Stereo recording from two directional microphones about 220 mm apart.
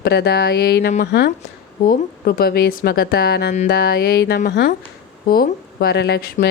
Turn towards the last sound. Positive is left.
turn(degrees=50)  # may be behind; listen again after turning